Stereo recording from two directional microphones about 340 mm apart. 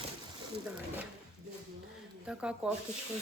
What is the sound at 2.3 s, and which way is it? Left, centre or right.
Coin, centre.